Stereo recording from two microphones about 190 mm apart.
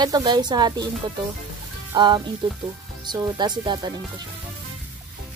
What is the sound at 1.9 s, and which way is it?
Speech, 25° right (ahead or behind).